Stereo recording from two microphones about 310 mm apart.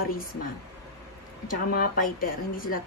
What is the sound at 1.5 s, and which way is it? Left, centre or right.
A woman's voice, left.